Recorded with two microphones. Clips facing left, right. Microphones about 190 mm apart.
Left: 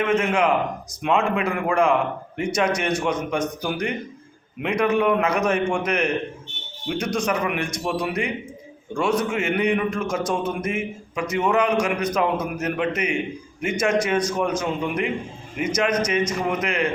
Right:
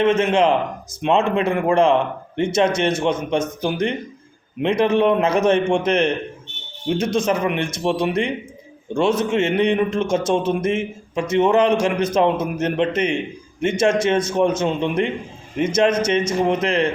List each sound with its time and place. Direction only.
0.0 s a man's voice: 25° right (ahead or behind)